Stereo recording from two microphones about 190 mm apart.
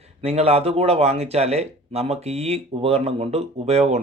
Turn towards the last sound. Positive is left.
turn(degrees=-35)  # may be behind; listen again after turning